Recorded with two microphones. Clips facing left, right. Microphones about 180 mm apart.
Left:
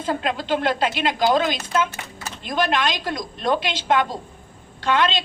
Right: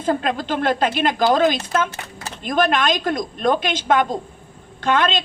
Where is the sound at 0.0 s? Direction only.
45° right (ahead or behind).